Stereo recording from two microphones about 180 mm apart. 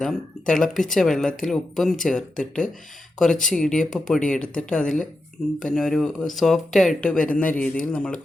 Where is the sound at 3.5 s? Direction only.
5° left (ahead or behind).